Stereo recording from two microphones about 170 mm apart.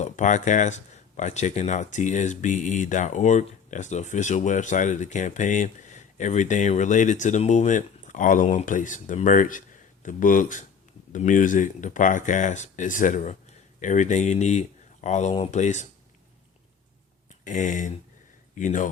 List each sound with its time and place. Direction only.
0.0 s speech: 45° left (ahead or behind)
17.4 s speech: 50° left (ahead or behind)